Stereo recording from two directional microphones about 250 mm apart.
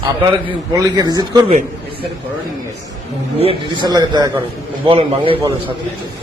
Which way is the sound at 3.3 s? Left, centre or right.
Right.